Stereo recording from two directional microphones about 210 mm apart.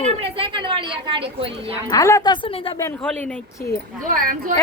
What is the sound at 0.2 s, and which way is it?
A woman's voice, 25° right (ahead or behind).